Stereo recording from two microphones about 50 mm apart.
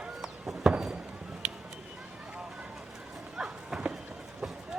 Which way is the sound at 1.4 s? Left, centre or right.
Centre.